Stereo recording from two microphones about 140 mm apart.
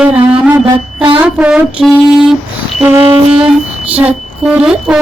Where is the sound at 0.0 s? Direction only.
10° right (ahead or behind).